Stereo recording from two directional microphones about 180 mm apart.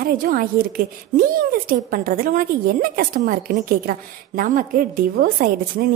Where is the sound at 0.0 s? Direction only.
50° right (ahead or behind).